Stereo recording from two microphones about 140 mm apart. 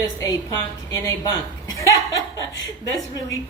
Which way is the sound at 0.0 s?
25° left (ahead or behind).